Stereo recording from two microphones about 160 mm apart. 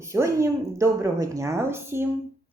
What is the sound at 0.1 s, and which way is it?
Speech, 20° right (ahead or behind).